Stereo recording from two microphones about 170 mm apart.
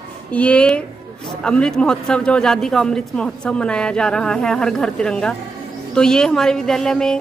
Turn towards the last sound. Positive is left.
turn(degrees=5)  # may be behind; listen again after turning